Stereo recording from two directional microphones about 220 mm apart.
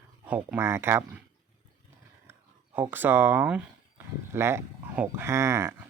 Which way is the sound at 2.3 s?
10° right (ahead or behind).